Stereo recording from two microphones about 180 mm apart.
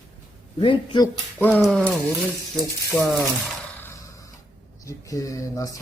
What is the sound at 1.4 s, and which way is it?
Speech, 10° left (ahead or behind).